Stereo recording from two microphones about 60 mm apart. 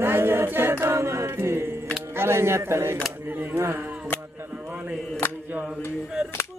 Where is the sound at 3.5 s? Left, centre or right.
Right.